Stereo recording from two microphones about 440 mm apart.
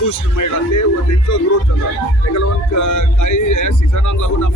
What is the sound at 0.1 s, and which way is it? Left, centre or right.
Speech, left.